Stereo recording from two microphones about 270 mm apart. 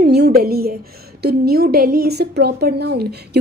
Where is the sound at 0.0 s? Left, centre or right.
Right.